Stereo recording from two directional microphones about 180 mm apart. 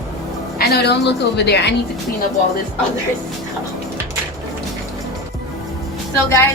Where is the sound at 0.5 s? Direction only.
65° left (ahead or behind).